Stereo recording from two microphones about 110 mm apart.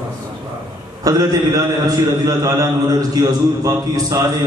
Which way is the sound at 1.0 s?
35° right (ahead or behind).